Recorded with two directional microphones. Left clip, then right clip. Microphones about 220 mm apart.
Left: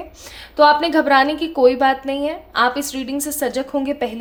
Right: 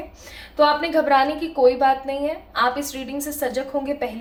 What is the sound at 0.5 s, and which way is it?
A woman's voice, 55° left (ahead or behind).